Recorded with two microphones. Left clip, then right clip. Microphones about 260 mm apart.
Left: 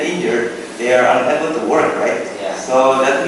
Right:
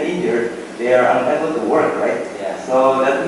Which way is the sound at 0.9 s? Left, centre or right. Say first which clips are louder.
Left 1 dB; centre.